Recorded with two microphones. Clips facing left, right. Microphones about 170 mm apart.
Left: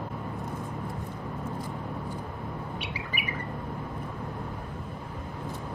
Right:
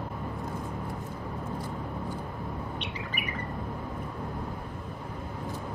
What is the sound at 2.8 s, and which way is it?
Bird, 10° left (ahead or behind).